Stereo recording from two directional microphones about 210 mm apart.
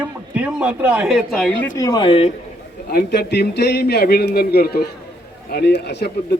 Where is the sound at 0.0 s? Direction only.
5° right (ahead or behind).